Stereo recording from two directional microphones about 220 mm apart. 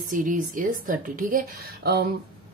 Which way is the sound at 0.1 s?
35° right (ahead or behind).